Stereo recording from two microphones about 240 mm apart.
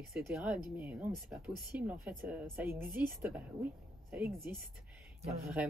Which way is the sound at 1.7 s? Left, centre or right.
Centre.